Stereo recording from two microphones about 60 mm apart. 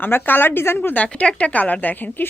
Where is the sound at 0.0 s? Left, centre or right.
Left.